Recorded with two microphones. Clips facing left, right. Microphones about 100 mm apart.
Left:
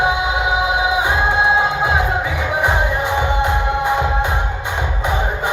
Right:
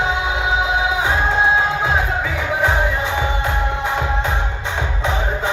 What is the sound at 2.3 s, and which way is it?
Music, 15° left (ahead or behind).